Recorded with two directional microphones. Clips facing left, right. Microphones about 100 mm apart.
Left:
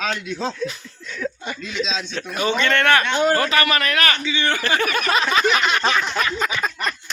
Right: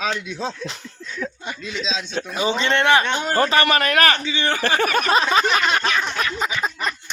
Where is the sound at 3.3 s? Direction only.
35° right (ahead or behind).